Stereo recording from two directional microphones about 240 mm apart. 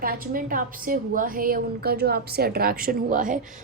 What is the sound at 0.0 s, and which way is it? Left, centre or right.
A woman's voice, right.